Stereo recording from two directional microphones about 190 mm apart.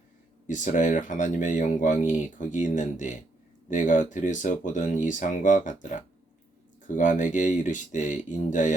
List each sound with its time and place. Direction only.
0.4 s speech: 40° left (ahead or behind)